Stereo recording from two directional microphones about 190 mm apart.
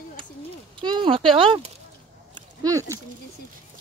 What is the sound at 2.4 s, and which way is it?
Speech, 15° right (ahead or behind).